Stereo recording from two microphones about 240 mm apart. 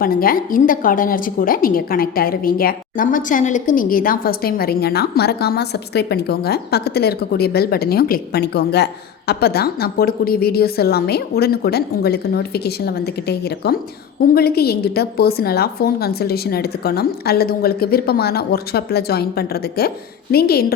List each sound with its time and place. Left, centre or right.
0.0 s a woman's voice: left